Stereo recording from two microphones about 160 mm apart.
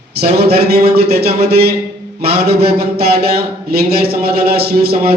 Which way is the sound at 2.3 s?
90° right.